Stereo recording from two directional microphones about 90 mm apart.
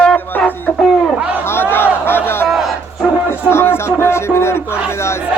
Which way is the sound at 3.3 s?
25° left (ahead or behind).